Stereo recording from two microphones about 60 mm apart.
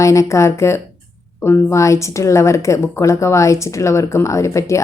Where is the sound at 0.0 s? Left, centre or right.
Left.